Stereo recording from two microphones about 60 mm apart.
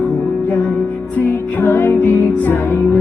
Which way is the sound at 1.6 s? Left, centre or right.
Left.